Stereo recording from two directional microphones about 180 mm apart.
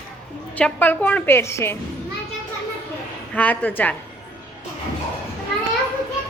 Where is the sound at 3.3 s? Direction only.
10° left (ahead or behind).